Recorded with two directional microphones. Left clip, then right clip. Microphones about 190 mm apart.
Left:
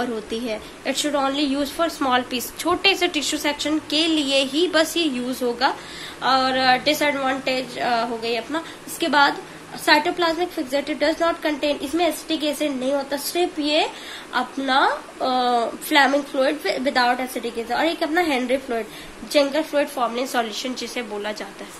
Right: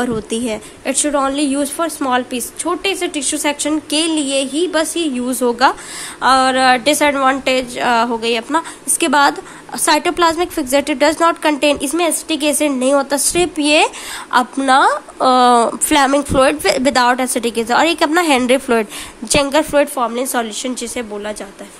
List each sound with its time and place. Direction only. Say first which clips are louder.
0.0 s a woman's voice: right 7 dB; 40° right (ahead or behind); by 3.3 s 25° right (ahead or behind)
3.3 s a woman's voice: right 5 dB; 40° right (ahead or behind)
5.3 s a woman's voice: right 11 dB; 45° right (ahead or behind)